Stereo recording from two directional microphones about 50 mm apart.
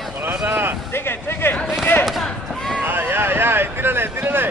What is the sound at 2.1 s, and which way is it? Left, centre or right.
Basketball bounce, centre.